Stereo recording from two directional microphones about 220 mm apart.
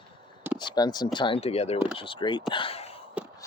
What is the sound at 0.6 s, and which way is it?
Speech, 20° left (ahead or behind).